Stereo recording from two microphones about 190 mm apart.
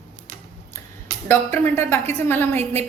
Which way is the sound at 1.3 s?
10° left (ahead or behind).